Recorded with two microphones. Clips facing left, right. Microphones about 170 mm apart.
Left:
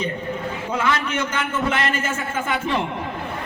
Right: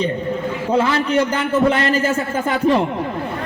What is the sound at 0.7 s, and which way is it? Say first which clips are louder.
A man's voice: right 7 dB; 35° right (ahead or behind).